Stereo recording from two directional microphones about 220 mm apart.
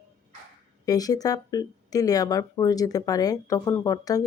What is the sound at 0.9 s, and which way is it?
Speech, 15° left (ahead or behind).